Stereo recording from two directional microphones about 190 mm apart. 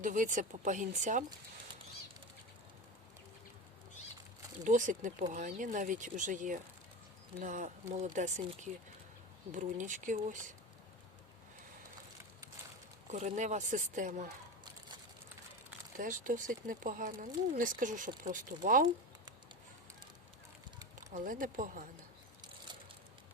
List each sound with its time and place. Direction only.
0.0 s speech: 40° right (ahead or behind)
4.6 s speech: 40° right (ahead or behind)
13.1 s speech: 40° right (ahead or behind)
16.0 s speech: 45° right (ahead or behind)
21.1 s speech: 45° right (ahead or behind)